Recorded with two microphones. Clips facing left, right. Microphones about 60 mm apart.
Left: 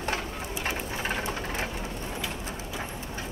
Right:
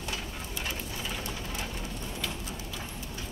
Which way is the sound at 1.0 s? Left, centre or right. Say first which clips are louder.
Left 6 dB; left.